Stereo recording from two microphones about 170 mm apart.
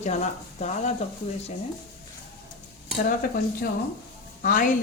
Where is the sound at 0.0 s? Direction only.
45° left (ahead or behind).